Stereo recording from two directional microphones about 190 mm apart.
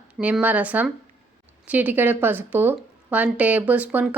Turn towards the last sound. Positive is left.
turn(degrees=-5)  # may be behind; listen again after turning